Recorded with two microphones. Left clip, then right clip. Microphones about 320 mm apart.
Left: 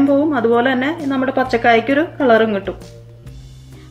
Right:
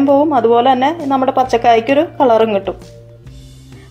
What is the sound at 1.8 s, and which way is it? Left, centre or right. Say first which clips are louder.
Speech: right 4 dB; right.